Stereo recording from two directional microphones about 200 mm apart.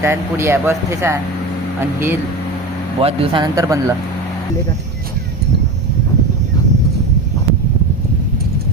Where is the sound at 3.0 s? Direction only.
25° right (ahead or behind).